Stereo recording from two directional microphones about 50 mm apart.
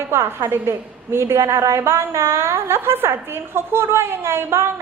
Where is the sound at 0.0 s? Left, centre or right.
Right.